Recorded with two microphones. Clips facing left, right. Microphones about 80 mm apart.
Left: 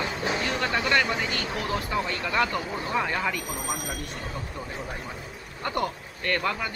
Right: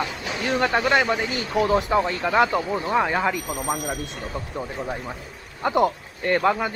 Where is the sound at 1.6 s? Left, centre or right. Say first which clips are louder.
Right 11 dB; right.